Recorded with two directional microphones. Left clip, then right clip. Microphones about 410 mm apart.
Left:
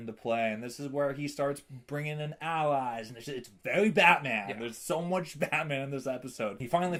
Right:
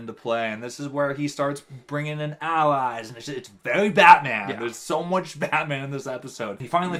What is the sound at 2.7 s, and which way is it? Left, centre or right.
Speech, left.